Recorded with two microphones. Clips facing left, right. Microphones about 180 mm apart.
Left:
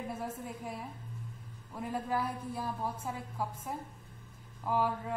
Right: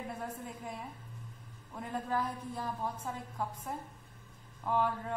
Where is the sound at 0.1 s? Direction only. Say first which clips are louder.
Left 2 dB; 5° left (ahead or behind).